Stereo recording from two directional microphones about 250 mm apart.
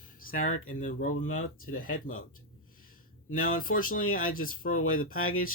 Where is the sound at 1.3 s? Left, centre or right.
Left.